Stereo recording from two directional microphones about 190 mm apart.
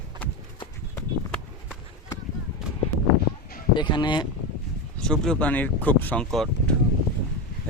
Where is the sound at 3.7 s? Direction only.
25° left (ahead or behind).